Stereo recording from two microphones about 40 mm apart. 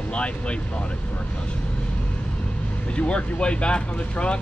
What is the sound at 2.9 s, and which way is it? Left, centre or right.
Speech, left.